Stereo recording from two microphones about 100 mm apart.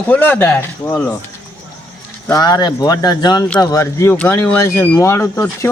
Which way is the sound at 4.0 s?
25° left (ahead or behind).